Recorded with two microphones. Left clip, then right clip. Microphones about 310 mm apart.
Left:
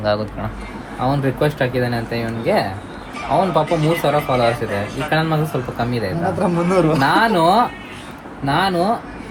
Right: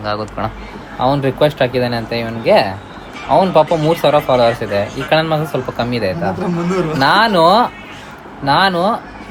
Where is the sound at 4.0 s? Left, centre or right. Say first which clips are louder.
Right 7 dB; centre.